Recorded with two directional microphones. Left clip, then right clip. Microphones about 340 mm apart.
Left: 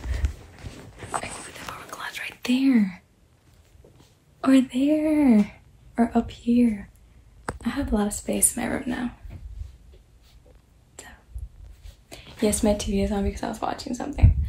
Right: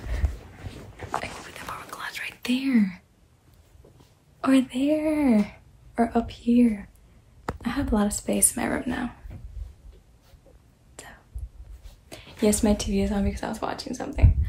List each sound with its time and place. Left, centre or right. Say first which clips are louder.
1.9 s whispering: left 3 dB; centre
4.4 s a woman's voice: left 2 dB; centre
11.0 s whispering: even; centre
12.1 s speech: right 1 dB; centre